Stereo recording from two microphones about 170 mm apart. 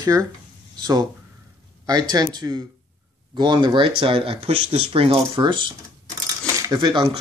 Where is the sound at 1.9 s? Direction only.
25° right (ahead or behind).